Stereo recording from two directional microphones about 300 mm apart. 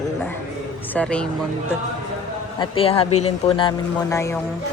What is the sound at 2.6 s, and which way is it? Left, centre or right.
Speech, centre.